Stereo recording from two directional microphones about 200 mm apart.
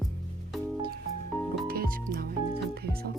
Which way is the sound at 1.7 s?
45° right (ahead or behind).